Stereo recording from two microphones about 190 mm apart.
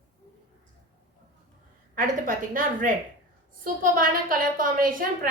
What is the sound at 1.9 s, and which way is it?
A woman's voice, 45° right (ahead or behind).